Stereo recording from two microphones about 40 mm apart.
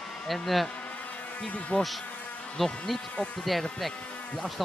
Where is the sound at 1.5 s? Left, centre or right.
Left.